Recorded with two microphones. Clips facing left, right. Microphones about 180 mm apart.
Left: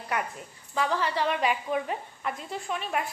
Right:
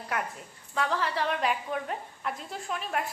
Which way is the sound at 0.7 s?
Centre (ahead or behind).